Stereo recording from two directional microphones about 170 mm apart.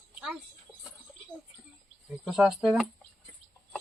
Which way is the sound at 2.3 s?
5° right (ahead or behind).